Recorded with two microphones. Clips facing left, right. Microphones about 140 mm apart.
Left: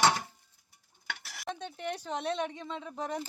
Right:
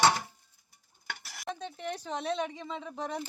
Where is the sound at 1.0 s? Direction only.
Centre (ahead or behind).